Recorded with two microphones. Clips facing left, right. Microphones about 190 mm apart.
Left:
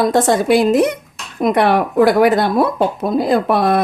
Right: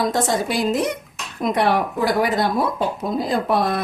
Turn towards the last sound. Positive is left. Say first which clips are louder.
# left 6 dB
turn(degrees=65)  # may be behind; listen again after turning